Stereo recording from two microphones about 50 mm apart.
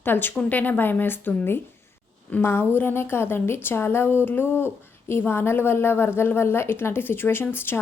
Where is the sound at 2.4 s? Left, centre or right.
Left.